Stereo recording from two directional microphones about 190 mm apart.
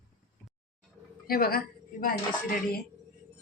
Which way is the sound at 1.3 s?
50° left (ahead or behind).